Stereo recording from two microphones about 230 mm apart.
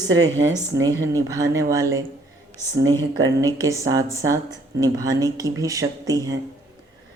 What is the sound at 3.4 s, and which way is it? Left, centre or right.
Speech, centre.